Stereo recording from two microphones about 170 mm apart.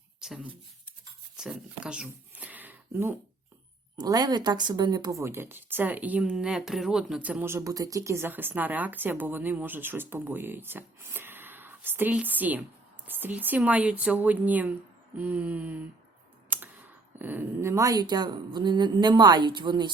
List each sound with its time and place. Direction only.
0.2 s speech: 5° right (ahead or behind)
1.4 s a sound: 5° right (ahead or behind)
3.9 s speech: 20° right (ahead or behind)